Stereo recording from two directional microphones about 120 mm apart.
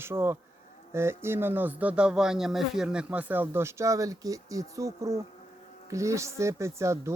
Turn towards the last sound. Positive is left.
turn(degrees=-25)  # may be behind; listen again after turning